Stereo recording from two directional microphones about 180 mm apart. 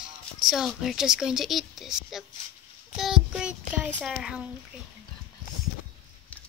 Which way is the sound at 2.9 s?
5° right (ahead or behind).